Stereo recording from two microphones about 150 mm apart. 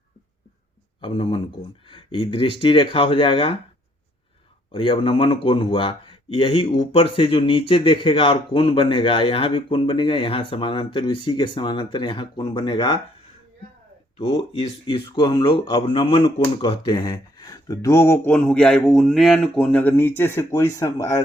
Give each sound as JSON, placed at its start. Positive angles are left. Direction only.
{"t": 1.0, "sound": "speech", "side_deg": 35}
{"t": 4.7, "sound": "speech", "side_deg": 35}
{"t": 14.3, "sound": "speech", "side_deg": 35}